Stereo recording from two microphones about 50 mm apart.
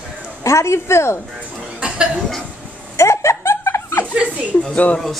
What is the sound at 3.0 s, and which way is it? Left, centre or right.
Laughter, left.